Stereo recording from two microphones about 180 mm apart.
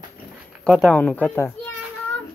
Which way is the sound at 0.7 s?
5° left (ahead or behind).